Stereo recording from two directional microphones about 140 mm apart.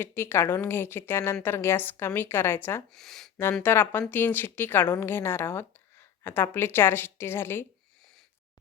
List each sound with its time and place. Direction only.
0.0 s a woman's voice: 15° left (ahead or behind)
2.9 s speech: centre (ahead or behind)
3.6 s a woman's voice: 15° left (ahead or behind)